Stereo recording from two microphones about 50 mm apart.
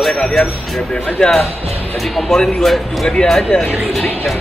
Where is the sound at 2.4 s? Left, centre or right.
Centre.